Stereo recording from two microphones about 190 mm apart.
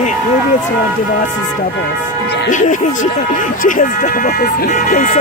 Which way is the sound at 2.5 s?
40° left (ahead or behind).